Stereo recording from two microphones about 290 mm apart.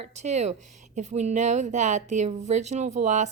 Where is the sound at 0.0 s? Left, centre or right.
Right.